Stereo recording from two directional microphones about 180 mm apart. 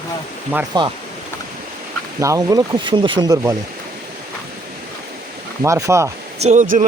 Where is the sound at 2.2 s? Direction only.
20° right (ahead or behind).